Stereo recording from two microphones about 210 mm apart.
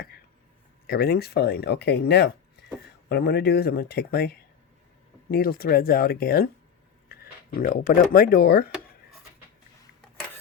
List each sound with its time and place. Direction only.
0.9 s speech: 50° left (ahead or behind)
2.6 s a sound: 50° left (ahead or behind)
3.1 s speech: 50° left (ahead or behind)
5.3 s speech: 45° left (ahead or behind)